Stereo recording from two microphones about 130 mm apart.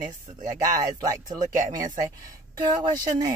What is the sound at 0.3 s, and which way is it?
Speech, 25° right (ahead or behind).